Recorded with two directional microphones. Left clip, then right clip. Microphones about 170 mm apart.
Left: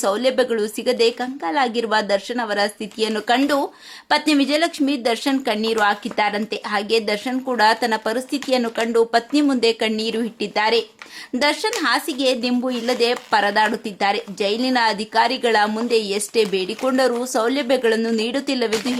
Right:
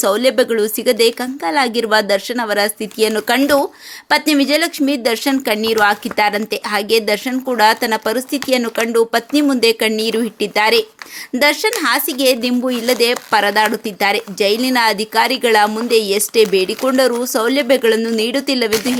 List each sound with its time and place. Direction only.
0.0 s speech: 20° right (ahead or behind)